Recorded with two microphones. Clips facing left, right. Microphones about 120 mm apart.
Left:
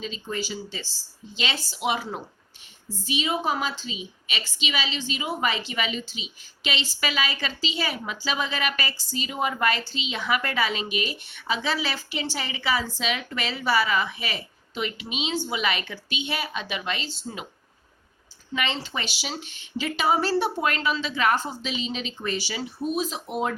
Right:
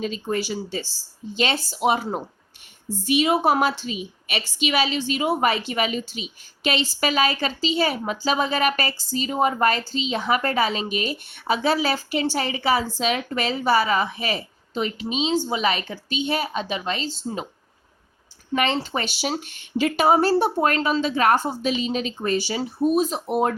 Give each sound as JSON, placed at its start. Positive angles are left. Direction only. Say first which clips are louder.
{"t": 0.0, "sound": "a woman's voice", "louder": "right 6 dB", "side_deg": -50}
{"t": 3.1, "sound": "a woman's voice", "louder": "right 7 dB", "side_deg": -55}
{"t": 18.5, "sound": "a woman's voice", "louder": "right 6 dB", "side_deg": -50}